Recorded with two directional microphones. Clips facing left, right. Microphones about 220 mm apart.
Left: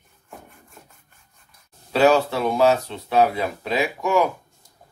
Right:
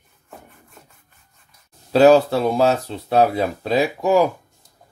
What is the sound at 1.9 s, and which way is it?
Speech, 35° right (ahead or behind).